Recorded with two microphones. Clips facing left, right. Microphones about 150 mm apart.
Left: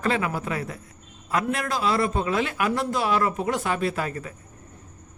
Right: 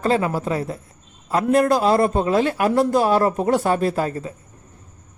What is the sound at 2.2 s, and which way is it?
Speech, 35° right (ahead or behind).